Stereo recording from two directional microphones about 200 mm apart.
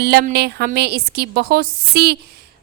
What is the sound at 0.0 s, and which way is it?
A woman's voice, 55° right (ahead or behind).